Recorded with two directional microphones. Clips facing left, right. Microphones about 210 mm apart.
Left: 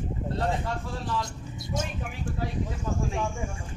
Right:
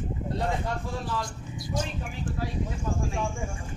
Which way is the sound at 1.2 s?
25° left (ahead or behind).